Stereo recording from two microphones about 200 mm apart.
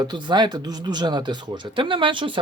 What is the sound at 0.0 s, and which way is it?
Speech, 20° right (ahead or behind).